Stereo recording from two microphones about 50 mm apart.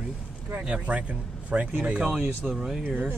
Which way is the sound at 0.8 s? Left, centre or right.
Right.